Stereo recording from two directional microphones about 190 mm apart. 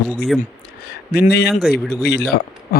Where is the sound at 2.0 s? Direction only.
60° left (ahead or behind).